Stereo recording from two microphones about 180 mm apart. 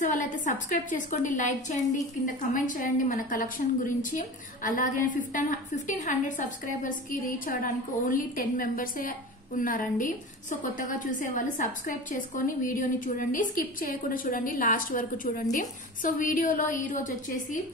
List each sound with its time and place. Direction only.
0.0 s a woman's voice: 45° left (ahead or behind)
11.1 s a woman's voice: 45° left (ahead or behind)